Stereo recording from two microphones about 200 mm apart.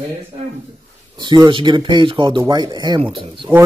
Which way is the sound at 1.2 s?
25° right (ahead or behind).